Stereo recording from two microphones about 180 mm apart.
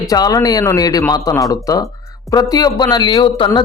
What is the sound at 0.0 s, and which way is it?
Speech, 20° left (ahead or behind).